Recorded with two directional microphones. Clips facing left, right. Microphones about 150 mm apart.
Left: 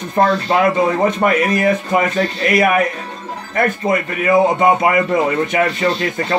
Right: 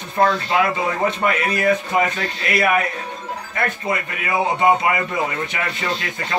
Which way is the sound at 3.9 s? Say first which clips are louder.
Left 8 dB; 45° left (ahead or behind).